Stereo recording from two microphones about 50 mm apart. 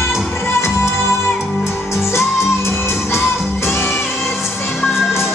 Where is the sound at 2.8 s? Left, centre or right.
Left.